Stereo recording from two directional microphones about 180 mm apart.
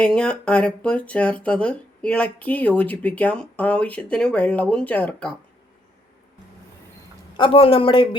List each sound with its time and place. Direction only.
0.0 s speech: 5° left (ahead or behind)
7.3 s speech: 30° left (ahead or behind)